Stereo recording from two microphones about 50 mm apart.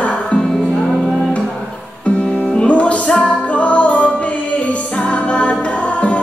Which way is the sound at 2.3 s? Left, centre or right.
Left.